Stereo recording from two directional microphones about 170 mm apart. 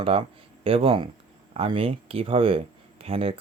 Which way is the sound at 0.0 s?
35° right (ahead or behind).